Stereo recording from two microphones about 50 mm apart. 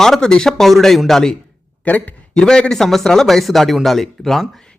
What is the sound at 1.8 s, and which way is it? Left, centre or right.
Speech, left.